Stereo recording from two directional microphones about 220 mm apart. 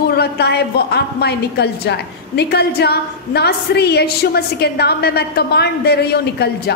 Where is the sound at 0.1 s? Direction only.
45° left (ahead or behind).